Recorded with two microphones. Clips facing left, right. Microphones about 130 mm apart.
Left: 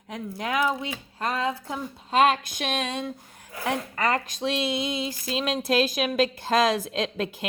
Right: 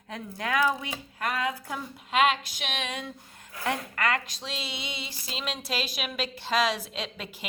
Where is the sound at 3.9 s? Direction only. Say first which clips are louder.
Left 3 dB; 35° left (ahead or behind).